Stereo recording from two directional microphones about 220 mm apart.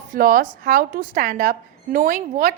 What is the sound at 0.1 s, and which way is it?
A woman's voice, 40° right (ahead or behind).